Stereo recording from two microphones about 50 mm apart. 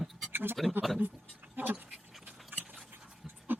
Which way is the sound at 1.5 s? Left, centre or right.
Right.